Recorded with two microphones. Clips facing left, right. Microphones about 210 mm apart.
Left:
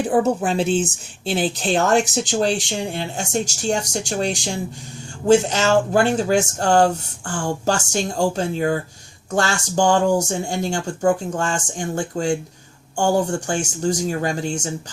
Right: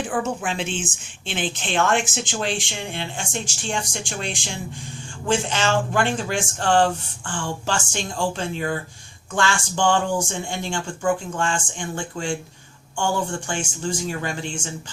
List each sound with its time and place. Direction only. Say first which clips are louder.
0.0 s speech: left 7 dB; 40° left (ahead or behind)